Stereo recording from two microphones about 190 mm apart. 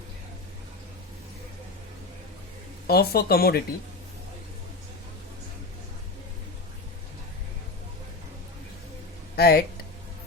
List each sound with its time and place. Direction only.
2.8 s speech: 55° left (ahead or behind)
9.3 s speech: 55° left (ahead or behind)